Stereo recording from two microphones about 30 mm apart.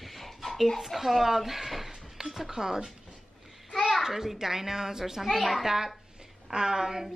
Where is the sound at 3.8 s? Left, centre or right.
Centre.